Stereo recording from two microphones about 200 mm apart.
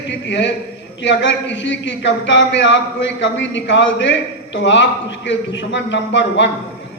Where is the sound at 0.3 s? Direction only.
65° left (ahead or behind).